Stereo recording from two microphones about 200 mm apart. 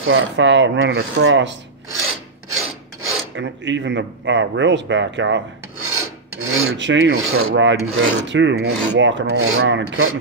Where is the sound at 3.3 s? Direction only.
65° right (ahead or behind).